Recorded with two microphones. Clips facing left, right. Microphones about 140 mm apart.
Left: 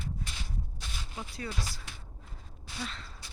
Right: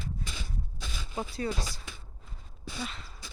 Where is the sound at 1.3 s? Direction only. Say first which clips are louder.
Right 4 dB; 25° right (ahead or behind).